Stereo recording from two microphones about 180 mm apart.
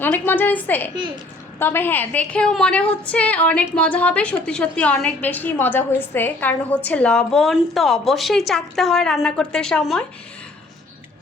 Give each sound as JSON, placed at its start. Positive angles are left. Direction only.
{"t": 0.0, "sound": "a woman's voice", "side_deg": 10}
{"t": 0.9, "sound": "a child's voice", "side_deg": -25}
{"t": 1.5, "sound": "a woman's voice", "side_deg": 10}